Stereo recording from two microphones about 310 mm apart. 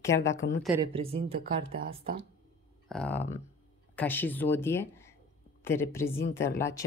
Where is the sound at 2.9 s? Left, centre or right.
Centre.